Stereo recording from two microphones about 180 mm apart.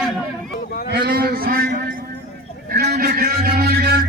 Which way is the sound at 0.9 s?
60° right (ahead or behind).